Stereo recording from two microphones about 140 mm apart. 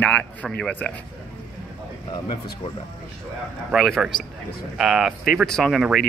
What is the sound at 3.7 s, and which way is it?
A man's voice, centre (ahead or behind).